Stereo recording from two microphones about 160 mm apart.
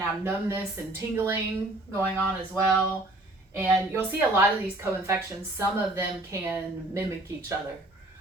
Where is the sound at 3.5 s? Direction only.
10° right (ahead or behind).